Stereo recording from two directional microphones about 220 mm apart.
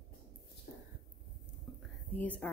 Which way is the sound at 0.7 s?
40° left (ahead or behind).